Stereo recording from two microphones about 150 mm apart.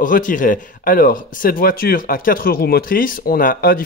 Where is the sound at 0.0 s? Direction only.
60° left (ahead or behind).